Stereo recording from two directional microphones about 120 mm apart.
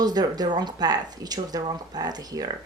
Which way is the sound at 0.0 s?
35° right (ahead or behind).